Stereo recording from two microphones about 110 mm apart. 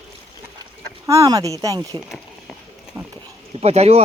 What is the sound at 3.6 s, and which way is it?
Speech, 70° right (ahead or behind).